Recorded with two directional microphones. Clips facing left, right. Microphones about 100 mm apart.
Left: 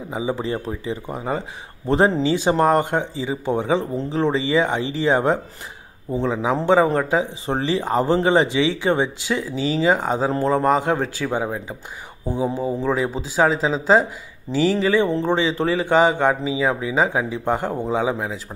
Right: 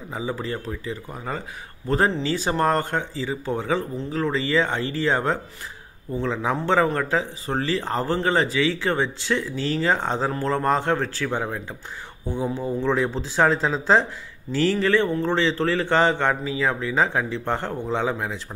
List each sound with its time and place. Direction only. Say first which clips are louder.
0.1 s speech: left 4 dB; 15° left (ahead or behind)